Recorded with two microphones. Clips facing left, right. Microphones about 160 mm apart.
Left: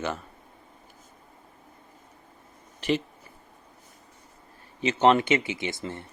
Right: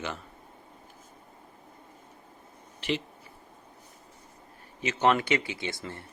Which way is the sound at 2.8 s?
45° left (ahead or behind).